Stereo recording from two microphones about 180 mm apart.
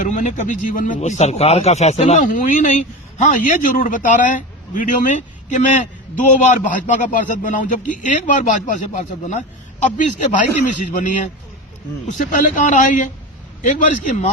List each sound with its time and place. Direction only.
0.0 s a man's voice: 45° left (ahead or behind)